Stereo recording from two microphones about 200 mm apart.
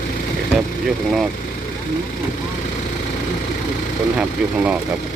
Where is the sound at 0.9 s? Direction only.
Centre (ahead or behind).